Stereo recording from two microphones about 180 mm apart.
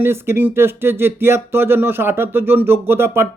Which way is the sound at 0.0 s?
15° right (ahead or behind).